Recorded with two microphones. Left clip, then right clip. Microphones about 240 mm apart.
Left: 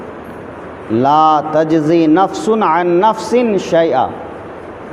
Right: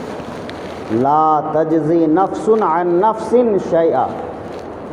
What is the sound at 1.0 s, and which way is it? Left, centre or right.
A man's voice, left.